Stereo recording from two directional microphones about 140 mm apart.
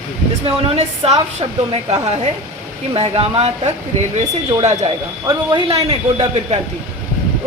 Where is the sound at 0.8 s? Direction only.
50° right (ahead or behind).